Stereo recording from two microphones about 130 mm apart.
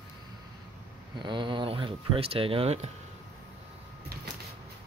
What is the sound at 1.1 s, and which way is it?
Speech, 40° right (ahead or behind).